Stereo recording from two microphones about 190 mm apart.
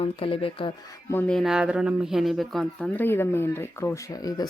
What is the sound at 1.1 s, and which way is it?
Speech, centre (ahead or behind).